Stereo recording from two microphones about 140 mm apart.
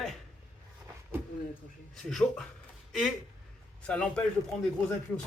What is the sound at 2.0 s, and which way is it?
Speech, 5° left (ahead or behind).